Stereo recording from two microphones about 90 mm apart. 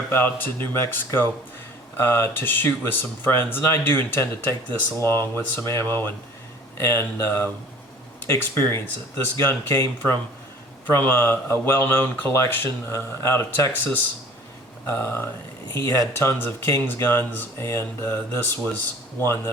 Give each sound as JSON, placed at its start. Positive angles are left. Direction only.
{"t": 0.1, "sound": "speech", "side_deg": 20}
{"t": 14.8, "sound": "speech", "side_deg": 25}